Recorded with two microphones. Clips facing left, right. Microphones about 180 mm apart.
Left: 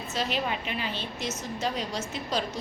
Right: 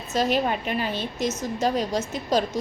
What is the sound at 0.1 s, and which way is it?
A woman's voice, 45° right (ahead or behind).